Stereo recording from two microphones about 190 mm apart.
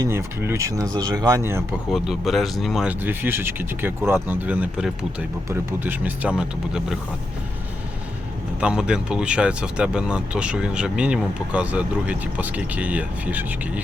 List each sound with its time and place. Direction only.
0.0 s speech: 15° right (ahead or behind)
1.9 s speech: centre (ahead or behind)
8.6 s speech: 5° right (ahead or behind)